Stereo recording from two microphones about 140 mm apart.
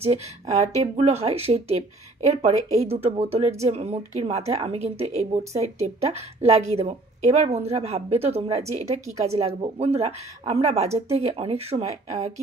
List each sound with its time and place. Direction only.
0.0 s a woman's voice: 50° right (ahead or behind)